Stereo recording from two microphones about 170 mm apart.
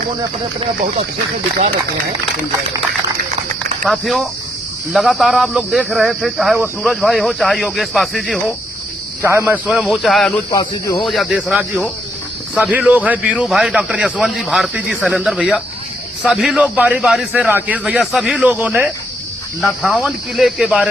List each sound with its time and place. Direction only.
3.8 s speech: centre (ahead or behind)
9.2 s a man's voice: 15° right (ahead or behind); by 10.3 s centre (ahead or behind)
10.5 s speech: 20° left (ahead or behind)
11.0 s a man's voice: centre (ahead or behind)